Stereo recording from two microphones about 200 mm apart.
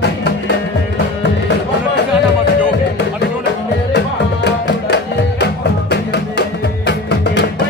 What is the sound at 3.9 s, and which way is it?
Music, 55° left (ahead or behind).